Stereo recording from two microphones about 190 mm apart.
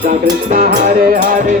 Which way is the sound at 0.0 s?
45° right (ahead or behind).